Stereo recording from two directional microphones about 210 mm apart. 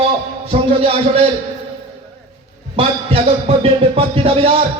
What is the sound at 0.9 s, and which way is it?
Speech, 25° right (ahead or behind).